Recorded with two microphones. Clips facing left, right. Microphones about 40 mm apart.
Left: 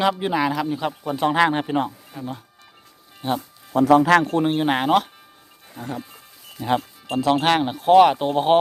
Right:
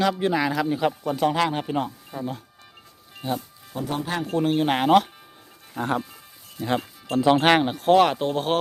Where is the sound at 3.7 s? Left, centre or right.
Left.